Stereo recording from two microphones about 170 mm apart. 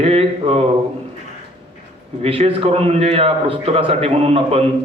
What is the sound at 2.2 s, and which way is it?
A man's voice, 35° right (ahead or behind).